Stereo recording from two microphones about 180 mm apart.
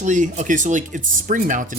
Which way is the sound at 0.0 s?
45° right (ahead or behind).